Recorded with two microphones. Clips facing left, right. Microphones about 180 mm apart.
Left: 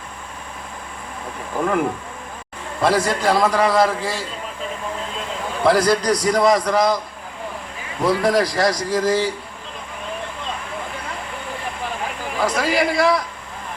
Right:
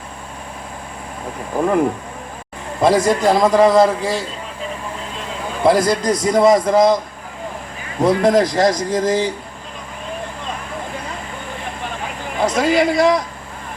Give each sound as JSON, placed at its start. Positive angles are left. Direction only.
{"t": 2.8, "sound": "a man's voice", "side_deg": -20}
{"t": 5.6, "sound": "a man's voice", "side_deg": -20}
{"t": 8.0, "sound": "a man's voice", "side_deg": -20}
{"t": 12.4, "sound": "a man's voice", "side_deg": -20}